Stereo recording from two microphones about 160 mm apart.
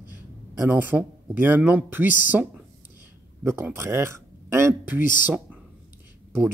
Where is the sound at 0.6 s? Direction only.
10° right (ahead or behind).